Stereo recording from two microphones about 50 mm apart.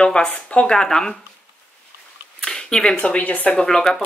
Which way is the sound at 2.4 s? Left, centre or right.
Centre.